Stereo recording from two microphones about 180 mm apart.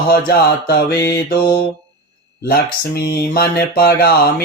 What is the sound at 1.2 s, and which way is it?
Mantra, 55° left (ahead or behind).